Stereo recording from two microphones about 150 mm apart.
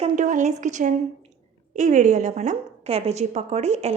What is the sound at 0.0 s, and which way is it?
A woman's voice, 55° right (ahead or behind).